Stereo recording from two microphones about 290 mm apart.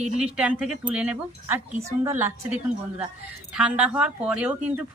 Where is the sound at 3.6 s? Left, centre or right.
Centre.